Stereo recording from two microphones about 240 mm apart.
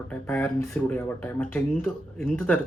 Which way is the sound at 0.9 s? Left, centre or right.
Centre.